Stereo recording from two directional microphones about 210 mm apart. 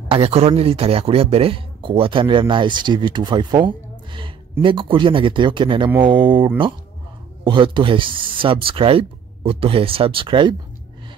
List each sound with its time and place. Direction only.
0.1 s a man's voice: 30° right (ahead or behind)